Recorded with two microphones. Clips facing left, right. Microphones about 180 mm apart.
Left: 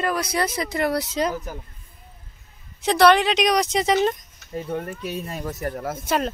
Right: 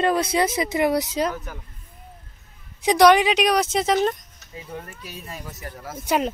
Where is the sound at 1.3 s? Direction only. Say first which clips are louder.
Left 4 dB; 30° left (ahead or behind).